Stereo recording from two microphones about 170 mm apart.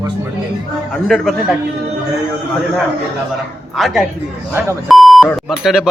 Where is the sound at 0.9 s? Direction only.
5° left (ahead or behind).